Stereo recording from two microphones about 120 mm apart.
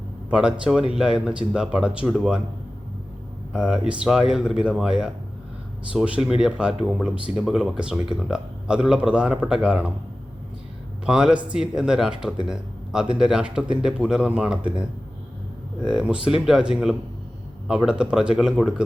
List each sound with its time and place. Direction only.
0.3 s speech: 10° right (ahead or behind)
3.5 s speech: 5° right (ahead or behind)
11.0 s a man's voice: 5° right (ahead or behind)